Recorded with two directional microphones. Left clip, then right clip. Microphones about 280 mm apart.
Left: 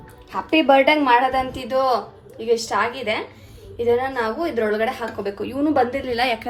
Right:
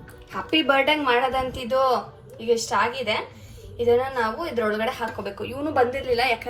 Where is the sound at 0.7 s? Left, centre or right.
Left.